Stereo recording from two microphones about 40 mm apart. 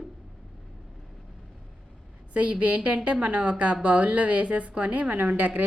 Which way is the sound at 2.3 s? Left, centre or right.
Right.